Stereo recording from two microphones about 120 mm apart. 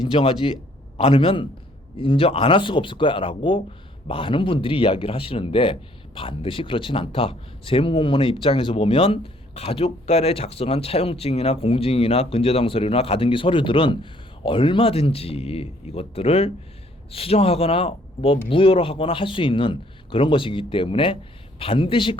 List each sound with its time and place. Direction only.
0.1 s speech: 50° left (ahead or behind)